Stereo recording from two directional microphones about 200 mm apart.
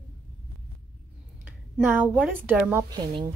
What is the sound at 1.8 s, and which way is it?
A woman's voice, 10° right (ahead or behind).